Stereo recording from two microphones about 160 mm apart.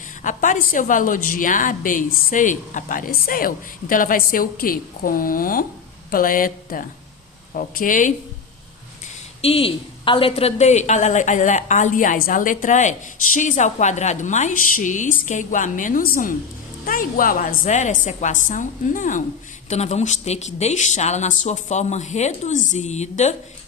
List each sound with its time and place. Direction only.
0.2 s a woman's voice: 55° left (ahead or behind)
9.4 s a woman's voice: 35° left (ahead or behind)